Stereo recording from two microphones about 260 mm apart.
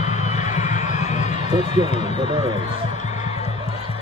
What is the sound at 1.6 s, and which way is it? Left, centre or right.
Speech, left.